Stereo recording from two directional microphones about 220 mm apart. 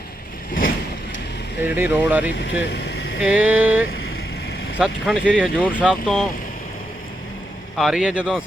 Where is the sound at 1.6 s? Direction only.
10° right (ahead or behind).